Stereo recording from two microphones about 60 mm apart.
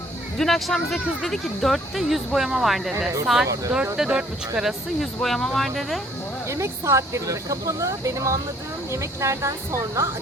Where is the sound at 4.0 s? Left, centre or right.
Centre.